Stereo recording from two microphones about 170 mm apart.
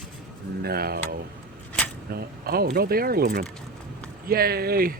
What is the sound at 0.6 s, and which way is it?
Speech, 65° right (ahead or behind).